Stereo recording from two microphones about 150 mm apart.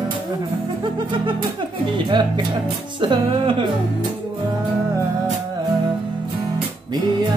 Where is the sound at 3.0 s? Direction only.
35° right (ahead or behind).